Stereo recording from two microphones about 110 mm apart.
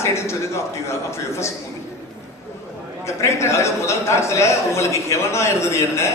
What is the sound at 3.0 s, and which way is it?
A man's voice, 25° left (ahead or behind).